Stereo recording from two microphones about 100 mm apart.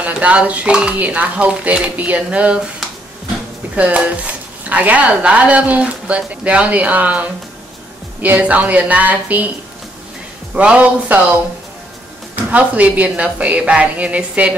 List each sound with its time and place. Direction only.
0.0 s speech: 15° right (ahead or behind)
3.7 s speech: 15° right (ahead or behind)
10.5 s speech: 10° right (ahead or behind)
12.4 s speech: 15° right (ahead or behind)